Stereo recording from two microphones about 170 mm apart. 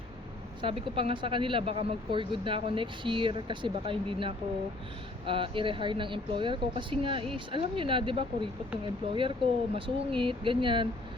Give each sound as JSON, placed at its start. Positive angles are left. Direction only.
{"t": 0.6, "sound": "speech", "side_deg": -30}